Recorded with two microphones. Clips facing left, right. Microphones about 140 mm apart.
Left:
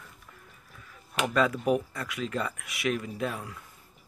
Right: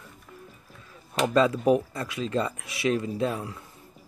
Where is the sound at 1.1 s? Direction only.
25° right (ahead or behind).